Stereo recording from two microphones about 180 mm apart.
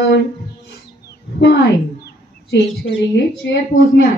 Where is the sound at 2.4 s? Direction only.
75° left (ahead or behind).